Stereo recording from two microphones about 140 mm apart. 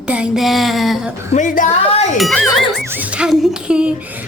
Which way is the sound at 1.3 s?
65° left (ahead or behind).